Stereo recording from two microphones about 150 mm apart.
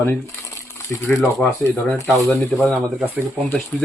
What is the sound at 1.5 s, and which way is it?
Speech, 20° left (ahead or behind).